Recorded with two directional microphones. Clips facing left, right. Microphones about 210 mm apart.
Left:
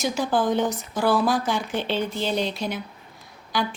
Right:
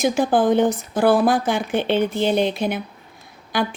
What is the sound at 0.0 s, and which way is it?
Speech, 55° right (ahead or behind).